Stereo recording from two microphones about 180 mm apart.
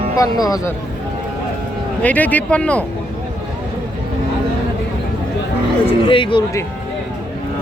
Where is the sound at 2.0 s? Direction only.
10° left (ahead or behind).